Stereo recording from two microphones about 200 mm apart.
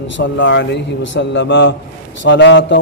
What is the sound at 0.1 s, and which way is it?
A man's voice, 65° left (ahead or behind).